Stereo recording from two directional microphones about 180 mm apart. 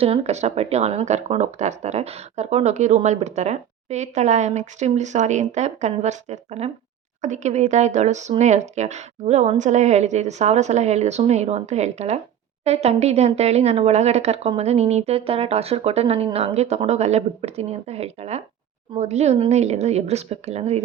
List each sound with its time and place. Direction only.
0.0 s speech: 35° right (ahead or behind)